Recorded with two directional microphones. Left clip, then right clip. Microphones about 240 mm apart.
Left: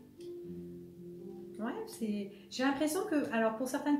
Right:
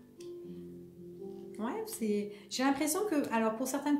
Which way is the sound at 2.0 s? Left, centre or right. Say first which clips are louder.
Right 6 dB; right.